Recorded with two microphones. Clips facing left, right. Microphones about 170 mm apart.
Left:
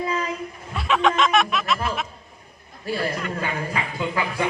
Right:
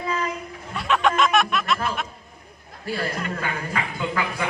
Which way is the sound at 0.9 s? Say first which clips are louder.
Even; centre (ahead or behind).